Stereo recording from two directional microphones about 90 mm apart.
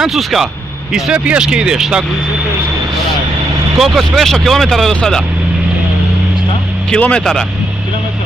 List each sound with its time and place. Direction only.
0.0 s speech: 5° right (ahead or behind)
3.7 s speech: 5° right (ahead or behind)
6.9 s speech: 10° left (ahead or behind)